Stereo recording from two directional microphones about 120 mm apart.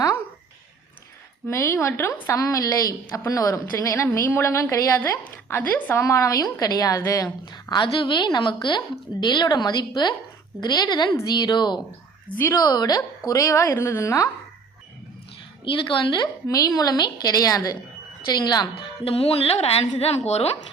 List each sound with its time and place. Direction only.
1.5 s a woman's voice: 20° left (ahead or behind); by 11.8 s 35° left (ahead or behind)
12.4 s a woman's voice: 20° left (ahead or behind)
12.6 s a woman's voice: 35° left (ahead or behind)
15.6 s a woman's voice: 45° left (ahead or behind)
16.2 s a woman's voice: 30° left (ahead or behind)
18.7 s speech: 50° left (ahead or behind)